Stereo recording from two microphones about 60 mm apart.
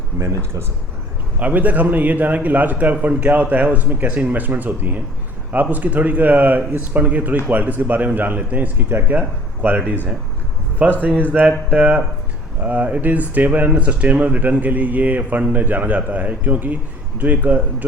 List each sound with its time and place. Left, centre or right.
1.4 s a man's voice: right
10.8 s a man's voice: centre
11.3 s a man's voice: right